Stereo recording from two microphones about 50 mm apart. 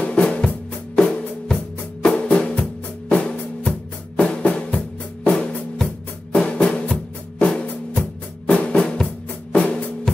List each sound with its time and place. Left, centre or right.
0.0 s music: left
4.2 s drum: centre
5.3 s music: centre
7.9 s drum: left
8.7 s drum: centre